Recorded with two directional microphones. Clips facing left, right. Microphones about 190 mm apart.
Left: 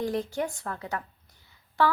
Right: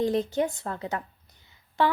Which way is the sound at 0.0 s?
20° right (ahead or behind).